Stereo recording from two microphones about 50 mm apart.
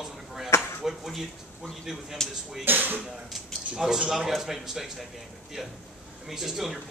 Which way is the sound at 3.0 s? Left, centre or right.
Centre.